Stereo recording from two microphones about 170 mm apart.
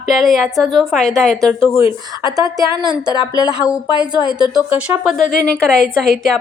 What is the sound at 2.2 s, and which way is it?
Speech, 20° right (ahead or behind).